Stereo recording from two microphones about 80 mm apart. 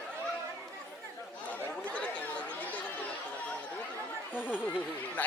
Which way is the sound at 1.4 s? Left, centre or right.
Centre.